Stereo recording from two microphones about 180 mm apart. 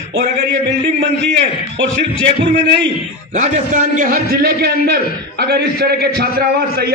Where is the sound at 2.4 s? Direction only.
70° right (ahead or behind).